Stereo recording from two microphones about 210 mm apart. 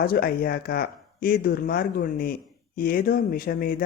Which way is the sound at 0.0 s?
45° left (ahead or behind).